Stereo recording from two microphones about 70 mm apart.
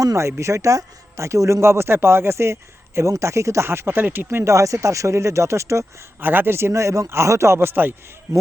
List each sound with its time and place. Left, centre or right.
0.0 s speech: right
4.5 s speech: right
6.1 s speech: right
8.3 s speech: right